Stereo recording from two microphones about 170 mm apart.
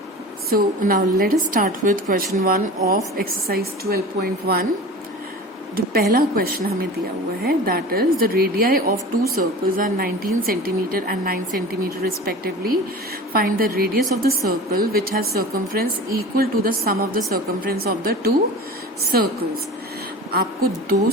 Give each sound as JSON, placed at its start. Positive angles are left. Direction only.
{"t": 0.5, "sound": "a woman's voice", "side_deg": -55}
{"t": 5.7, "sound": "a woman's voice", "side_deg": -60}